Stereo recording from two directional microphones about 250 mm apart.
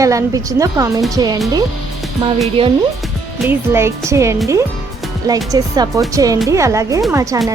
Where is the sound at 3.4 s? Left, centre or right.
Centre.